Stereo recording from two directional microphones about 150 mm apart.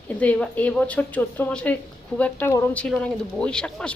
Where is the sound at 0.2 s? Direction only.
10° left (ahead or behind).